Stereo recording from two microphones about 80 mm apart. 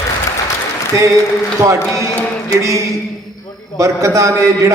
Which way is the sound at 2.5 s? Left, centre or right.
Right.